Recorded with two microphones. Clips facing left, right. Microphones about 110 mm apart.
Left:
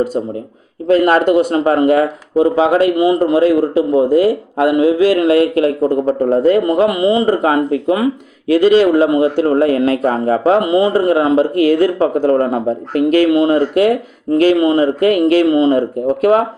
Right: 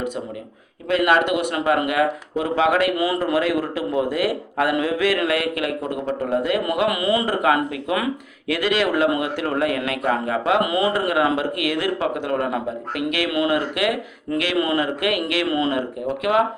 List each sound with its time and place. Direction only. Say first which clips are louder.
0.9 s a man's voice: left 7 dB; 40° left (ahead or behind)
16.2 s a man's voice: left 7 dB; 40° left (ahead or behind)